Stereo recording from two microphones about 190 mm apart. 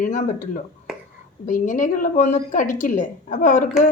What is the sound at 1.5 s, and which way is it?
A woman's voice, 40° left (ahead or behind).